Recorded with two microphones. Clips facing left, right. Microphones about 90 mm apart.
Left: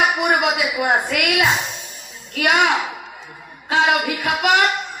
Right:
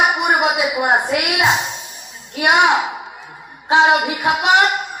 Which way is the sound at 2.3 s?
20° right (ahead or behind).